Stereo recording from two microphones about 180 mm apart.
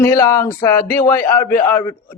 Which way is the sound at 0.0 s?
15° left (ahead or behind).